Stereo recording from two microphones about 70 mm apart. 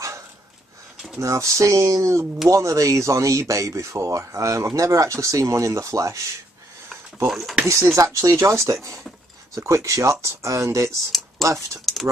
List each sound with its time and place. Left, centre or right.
1.2 s speech: right
7.2 s speech: centre
7.6 s speech: right
11.1 s a sound: centre
11.8 s speech: centre